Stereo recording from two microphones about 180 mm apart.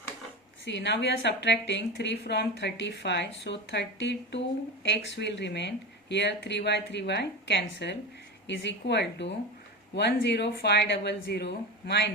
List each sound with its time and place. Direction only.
0.6 s a woman's voice: 75° left (ahead or behind)